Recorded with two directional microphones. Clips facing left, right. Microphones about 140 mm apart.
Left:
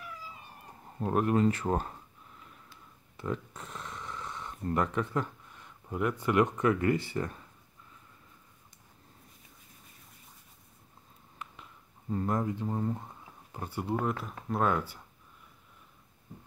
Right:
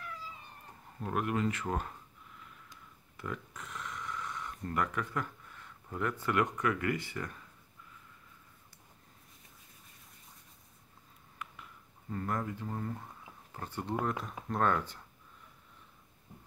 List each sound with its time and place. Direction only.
0.9 s speech: 35° left (ahead or behind)
3.2 s speech: 30° left (ahead or behind)
11.3 s a sound: 25° left (ahead or behind)
14.0 s speech: 5° left (ahead or behind)